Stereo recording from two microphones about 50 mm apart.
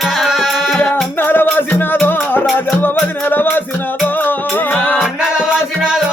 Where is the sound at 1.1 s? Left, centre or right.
Left.